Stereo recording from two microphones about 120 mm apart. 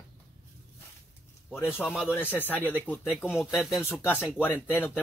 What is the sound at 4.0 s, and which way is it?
Speech, 15° left (ahead or behind).